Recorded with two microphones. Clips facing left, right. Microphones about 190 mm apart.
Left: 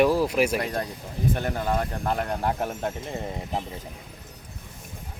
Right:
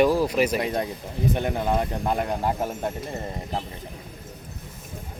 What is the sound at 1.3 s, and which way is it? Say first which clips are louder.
Speech: right 3 dB; 15° right (ahead or behind).